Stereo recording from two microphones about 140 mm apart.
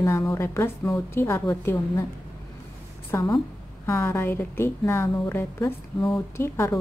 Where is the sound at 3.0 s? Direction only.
20° left (ahead or behind).